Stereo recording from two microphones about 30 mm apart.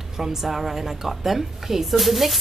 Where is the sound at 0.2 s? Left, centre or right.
Centre.